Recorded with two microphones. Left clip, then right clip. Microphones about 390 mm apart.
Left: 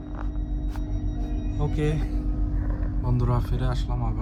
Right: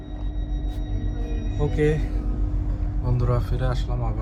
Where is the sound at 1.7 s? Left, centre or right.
Centre.